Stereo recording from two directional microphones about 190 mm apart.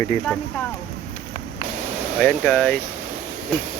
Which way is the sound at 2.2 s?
5° left (ahead or behind).